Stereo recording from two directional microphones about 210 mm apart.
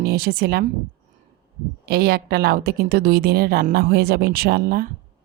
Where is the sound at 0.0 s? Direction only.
50° right (ahead or behind).